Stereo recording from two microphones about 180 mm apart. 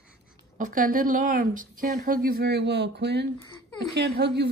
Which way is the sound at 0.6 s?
50° right (ahead or behind).